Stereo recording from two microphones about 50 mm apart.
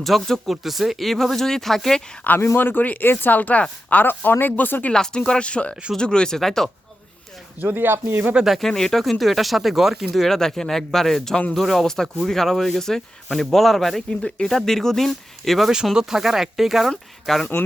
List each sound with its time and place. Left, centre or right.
0.0 s speech: centre
2.3 s speech: left
4.9 s speech: centre
7.6 s speech: right
8.6 s speech: centre
14.2 s speech: centre
14.5 s speech: centre
16.0 s speech: centre